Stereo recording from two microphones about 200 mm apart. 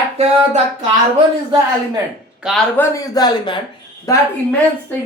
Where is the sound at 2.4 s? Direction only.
Centre (ahead or behind).